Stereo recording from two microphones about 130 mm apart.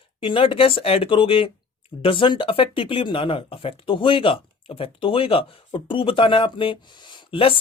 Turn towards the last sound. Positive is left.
turn(degrees=45)  # may be behind; listen again after turning